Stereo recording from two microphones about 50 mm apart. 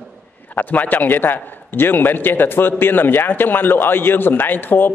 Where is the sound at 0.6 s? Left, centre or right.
Left.